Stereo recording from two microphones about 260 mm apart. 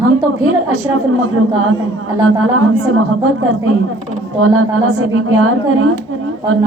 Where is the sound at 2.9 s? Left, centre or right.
Right.